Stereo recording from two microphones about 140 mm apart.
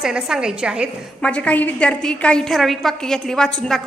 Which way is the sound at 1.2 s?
10° left (ahead or behind).